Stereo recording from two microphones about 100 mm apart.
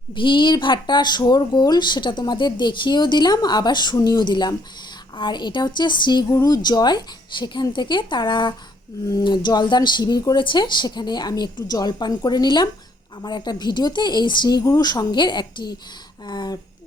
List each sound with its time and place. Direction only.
0.1 s speech: 55° left (ahead or behind)